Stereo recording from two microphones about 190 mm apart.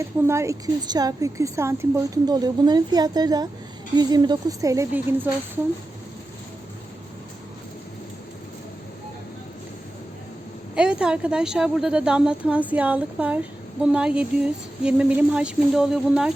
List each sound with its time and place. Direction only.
0.0 s a woman's voice: 15° right (ahead or behind)
10.8 s a woman's voice: 5° right (ahead or behind)